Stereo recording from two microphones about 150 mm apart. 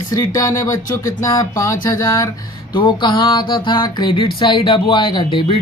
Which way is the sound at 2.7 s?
30° left (ahead or behind).